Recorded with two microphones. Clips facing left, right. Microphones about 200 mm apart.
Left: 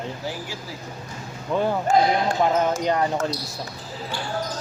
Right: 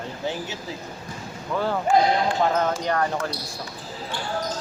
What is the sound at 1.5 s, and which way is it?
Speech, 20° left (ahead or behind).